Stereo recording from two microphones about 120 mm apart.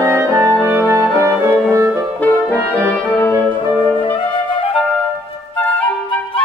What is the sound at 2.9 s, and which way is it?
Brass instrument, 15° left (ahead or behind).